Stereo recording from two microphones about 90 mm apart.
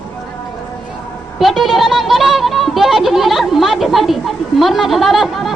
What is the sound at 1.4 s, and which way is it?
A woman's voice, centre (ahead or behind).